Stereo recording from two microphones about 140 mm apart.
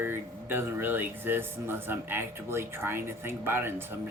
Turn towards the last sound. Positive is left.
turn(degrees=-15)  # may be behind; listen again after turning